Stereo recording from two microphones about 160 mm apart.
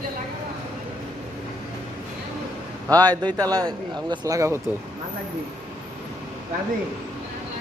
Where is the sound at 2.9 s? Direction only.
25° right (ahead or behind).